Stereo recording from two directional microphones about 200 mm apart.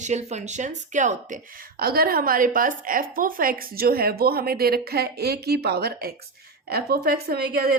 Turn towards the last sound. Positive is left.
turn(degrees=-50)  # may be behind; listen again after turning